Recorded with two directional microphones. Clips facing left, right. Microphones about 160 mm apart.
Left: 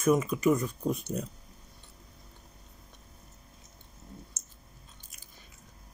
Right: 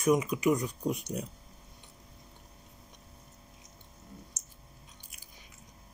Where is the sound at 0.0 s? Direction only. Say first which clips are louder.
Left 1 dB; 15° right (ahead or behind).